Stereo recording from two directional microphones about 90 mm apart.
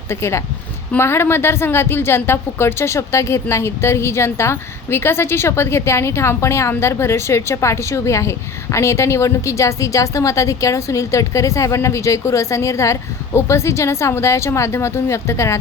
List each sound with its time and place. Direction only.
0.1 s a woman's voice: 30° left (ahead or behind)